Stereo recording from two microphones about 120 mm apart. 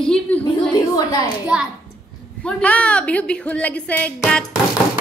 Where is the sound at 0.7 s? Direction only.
30° left (ahead or behind).